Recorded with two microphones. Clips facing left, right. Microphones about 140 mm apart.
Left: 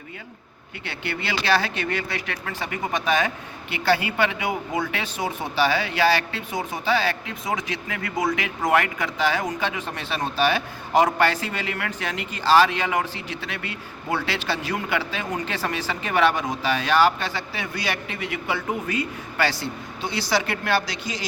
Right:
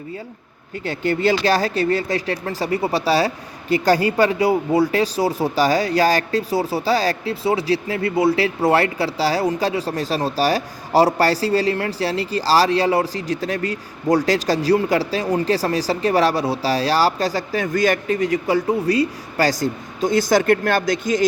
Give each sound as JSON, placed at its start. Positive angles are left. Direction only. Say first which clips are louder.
{"t": 0.9, "sound": "speech", "louder": "right 11 dB", "side_deg": -40}